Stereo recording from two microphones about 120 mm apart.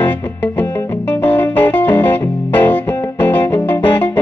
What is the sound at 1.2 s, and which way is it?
Music, 15° left (ahead or behind).